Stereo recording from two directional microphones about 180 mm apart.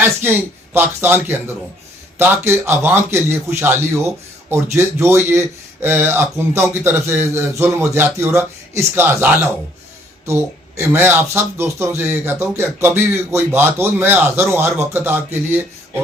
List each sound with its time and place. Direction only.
0.0 s speech: 10° right (ahead or behind)
10.8 s speech: 10° right (ahead or behind)